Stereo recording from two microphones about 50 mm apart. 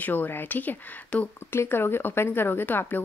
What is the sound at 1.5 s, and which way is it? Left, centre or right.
A woman's voice, left.